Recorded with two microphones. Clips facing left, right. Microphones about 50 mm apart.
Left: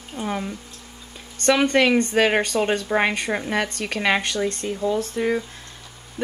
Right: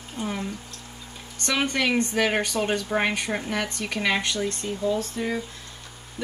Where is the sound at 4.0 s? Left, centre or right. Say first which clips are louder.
Left 3 dB; left.